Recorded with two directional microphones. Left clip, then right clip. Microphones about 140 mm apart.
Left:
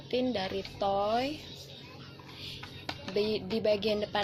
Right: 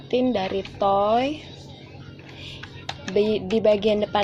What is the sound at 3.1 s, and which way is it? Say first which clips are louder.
A woman's voice: right 10 dB; 45° right (ahead or behind).